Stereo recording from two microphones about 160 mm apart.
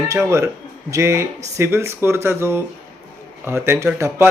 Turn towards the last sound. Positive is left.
turn(degrees=-15)  # may be behind; listen again after turning